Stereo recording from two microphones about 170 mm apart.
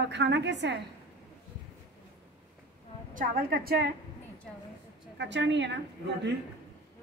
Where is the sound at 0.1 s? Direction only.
90° right.